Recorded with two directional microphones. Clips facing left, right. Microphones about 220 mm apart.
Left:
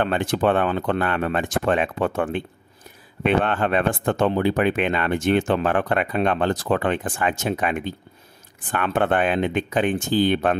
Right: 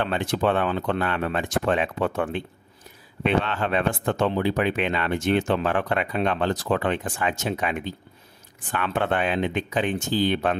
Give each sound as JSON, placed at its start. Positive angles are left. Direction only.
{"t": 0.0, "sound": "speech", "side_deg": 50}